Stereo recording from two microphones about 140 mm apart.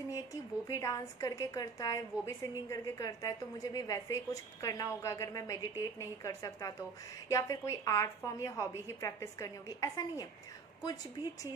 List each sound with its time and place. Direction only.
0.1 s speech: 25° left (ahead or behind)